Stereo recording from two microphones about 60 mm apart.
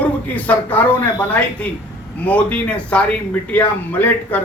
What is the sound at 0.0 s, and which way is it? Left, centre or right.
A man's voice, left.